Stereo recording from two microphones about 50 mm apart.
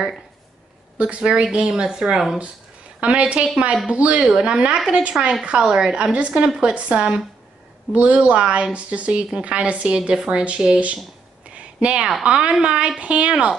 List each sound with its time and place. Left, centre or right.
0.9 s a woman's voice: right
4.2 s a woman's voice: centre
6.7 s speech: right
11.5 s a sound: right
12.1 s speech: centre